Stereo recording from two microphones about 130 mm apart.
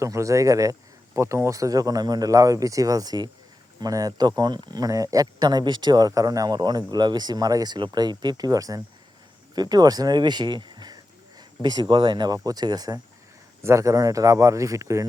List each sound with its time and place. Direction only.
0.0 s speech: 25° right (ahead or behind)